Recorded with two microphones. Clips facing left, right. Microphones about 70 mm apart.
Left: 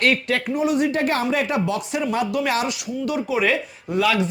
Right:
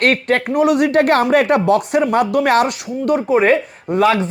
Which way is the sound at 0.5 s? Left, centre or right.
Right.